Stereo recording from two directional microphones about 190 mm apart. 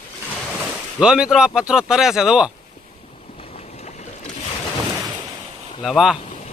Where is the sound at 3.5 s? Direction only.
35° left (ahead or behind).